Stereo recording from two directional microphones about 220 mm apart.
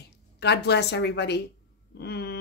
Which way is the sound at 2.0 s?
50° left (ahead or behind).